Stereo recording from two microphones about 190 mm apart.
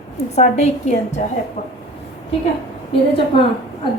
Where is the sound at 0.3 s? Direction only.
35° left (ahead or behind).